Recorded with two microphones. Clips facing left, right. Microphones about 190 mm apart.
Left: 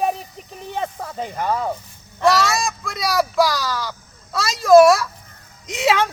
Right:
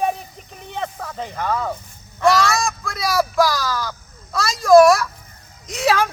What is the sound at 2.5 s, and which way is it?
Speech, centre (ahead or behind).